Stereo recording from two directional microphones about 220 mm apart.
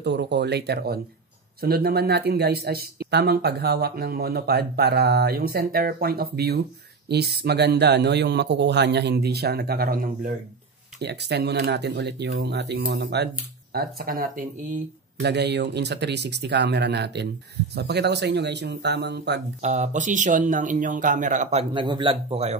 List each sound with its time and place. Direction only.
0.0 s speech: 50° right (ahead or behind)
15.2 s speech: 50° right (ahead or behind)
19.6 s speech: 30° right (ahead or behind)